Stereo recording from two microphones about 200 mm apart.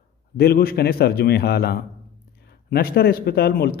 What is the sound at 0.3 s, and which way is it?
Speech, 50° left (ahead or behind).